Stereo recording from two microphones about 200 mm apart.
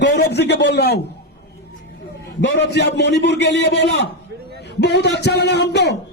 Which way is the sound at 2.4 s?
60° left (ahead or behind).